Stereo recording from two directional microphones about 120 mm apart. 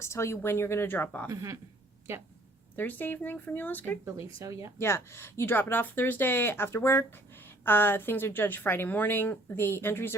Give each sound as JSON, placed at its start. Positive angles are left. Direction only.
{"t": 0.0, "sound": "speech", "side_deg": 25}
{"t": 1.3, "sound": "speech", "side_deg": -25}
{"t": 2.7, "sound": "a woman's voice", "side_deg": 15}
{"t": 4.0, "sound": "speech", "side_deg": -25}
{"t": 4.8, "sound": "a woman's voice", "side_deg": 20}